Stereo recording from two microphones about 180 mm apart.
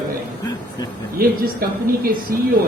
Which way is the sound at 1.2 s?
55° right (ahead or behind).